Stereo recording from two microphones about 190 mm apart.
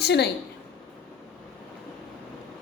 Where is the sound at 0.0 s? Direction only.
60° left (ahead or behind).